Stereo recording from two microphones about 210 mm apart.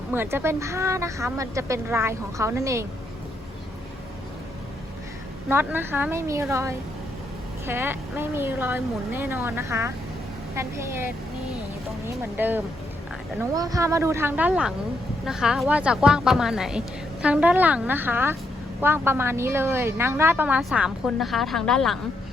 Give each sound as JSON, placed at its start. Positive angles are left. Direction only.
{"t": 0.1, "sound": "a woman's voice", "side_deg": -10}
{"t": 5.5, "sound": "a woman's voice", "side_deg": -10}